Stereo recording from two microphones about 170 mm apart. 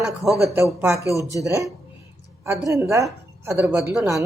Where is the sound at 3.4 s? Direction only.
15° right (ahead or behind).